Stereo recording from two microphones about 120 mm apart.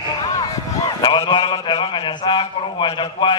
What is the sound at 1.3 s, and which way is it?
A man's voice, 40° left (ahead or behind).